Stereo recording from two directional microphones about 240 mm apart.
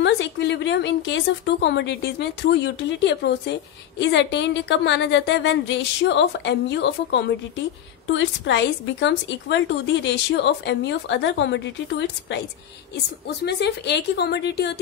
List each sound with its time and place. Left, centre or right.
0.0 s a woman's voice: left
13.5 s a woman's voice: left